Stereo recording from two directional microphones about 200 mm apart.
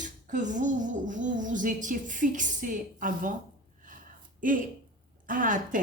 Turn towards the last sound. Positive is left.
turn(degrees=-40)  # may be behind; listen again after turning